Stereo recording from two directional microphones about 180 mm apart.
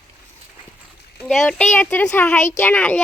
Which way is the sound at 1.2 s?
5° left (ahead or behind).